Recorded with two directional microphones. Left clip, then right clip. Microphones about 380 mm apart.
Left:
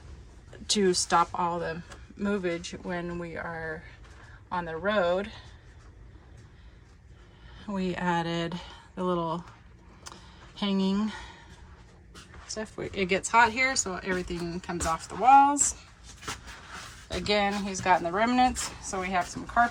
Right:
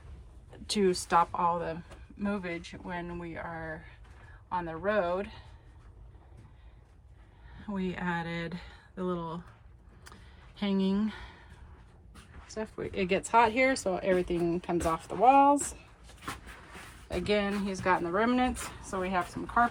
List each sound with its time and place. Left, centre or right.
0.7 s speech: centre
7.5 s speech: centre
10.0 s a sound: centre
12.5 s speech: centre
17.1 s speech: centre